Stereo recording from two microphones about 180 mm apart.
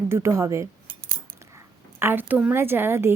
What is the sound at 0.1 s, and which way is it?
Speech, 15° right (ahead or behind).